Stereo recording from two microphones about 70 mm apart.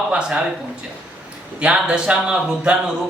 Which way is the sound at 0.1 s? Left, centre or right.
Centre.